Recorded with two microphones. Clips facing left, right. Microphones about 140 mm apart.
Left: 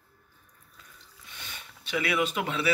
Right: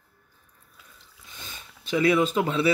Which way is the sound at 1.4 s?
35° right (ahead or behind).